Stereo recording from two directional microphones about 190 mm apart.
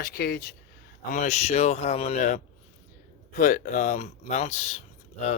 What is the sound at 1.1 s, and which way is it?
Speech, 40° left (ahead or behind).